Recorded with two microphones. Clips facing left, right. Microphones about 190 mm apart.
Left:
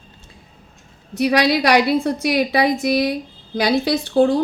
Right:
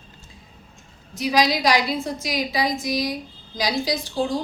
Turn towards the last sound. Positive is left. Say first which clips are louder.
# left 8 dB
turn(degrees=60)  # may be behind; listen again after turning